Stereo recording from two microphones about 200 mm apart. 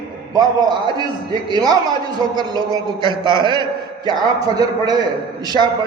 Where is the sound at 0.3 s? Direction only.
20° right (ahead or behind).